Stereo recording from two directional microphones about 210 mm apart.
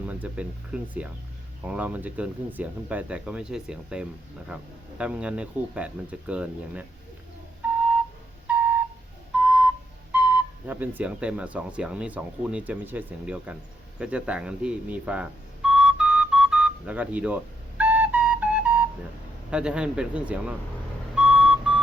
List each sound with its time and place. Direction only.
0.0 s speech: 5° right (ahead or behind)
8.4 s flute: 5° right (ahead or behind)
9.4 s a sound: 5° right (ahead or behind)
10.1 s speech: 5° right (ahead or behind)
14.0 s beep: 5° right (ahead or behind)
19.5 s speech: 5° right (ahead or behind)
21.2 s vehicle: 5° right (ahead or behind)